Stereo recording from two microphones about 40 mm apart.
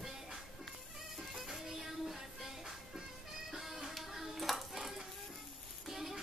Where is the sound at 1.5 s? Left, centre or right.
Centre.